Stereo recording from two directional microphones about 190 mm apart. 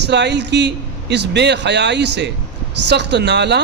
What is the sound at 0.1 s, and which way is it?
A man's voice, 65° right (ahead or behind).